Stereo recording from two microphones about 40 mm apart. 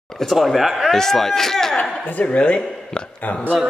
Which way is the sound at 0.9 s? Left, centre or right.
Centre.